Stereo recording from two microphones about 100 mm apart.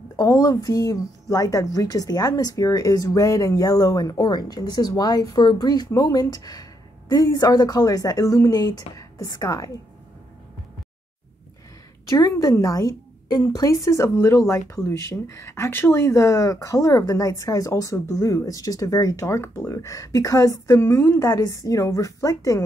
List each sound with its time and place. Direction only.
0.1 s a woman's voice: 35° left (ahead or behind)
12.1 s a woman's voice: 40° left (ahead or behind)